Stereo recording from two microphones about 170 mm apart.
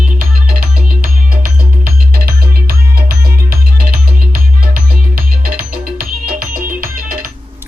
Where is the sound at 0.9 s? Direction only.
55° right (ahead or behind).